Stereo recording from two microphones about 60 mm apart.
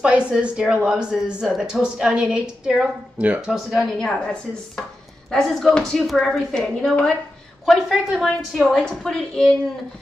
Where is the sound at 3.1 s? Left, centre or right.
Right.